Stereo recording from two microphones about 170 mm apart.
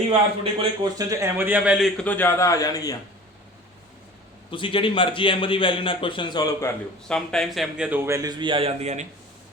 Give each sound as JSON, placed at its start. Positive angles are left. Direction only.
{"t": 0.6, "sound": "speech", "side_deg": -25}
{"t": 1.4, "sound": "a man's voice", "side_deg": -10}
{"t": 4.5, "sound": "a man's voice", "side_deg": 30}
{"t": 7.1, "sound": "a man's voice", "side_deg": 5}